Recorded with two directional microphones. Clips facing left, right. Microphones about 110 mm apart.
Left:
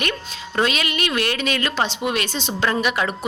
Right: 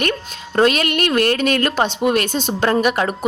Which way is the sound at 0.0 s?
45° right (ahead or behind).